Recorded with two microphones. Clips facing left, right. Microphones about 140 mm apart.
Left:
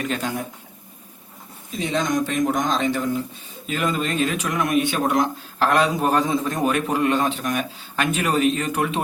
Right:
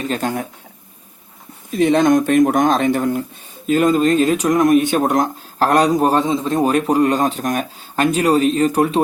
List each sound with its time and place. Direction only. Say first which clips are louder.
0.2 s speech: right 5 dB; 55° right (ahead or behind)
1.7 s speech: right 10 dB; 60° right (ahead or behind)
3.7 s speech: right 10 dB; 40° right (ahead or behind)